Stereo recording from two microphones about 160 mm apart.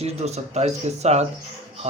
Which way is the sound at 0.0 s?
40° right (ahead or behind).